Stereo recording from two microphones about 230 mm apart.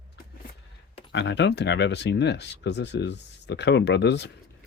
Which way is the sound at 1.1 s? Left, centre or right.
Left.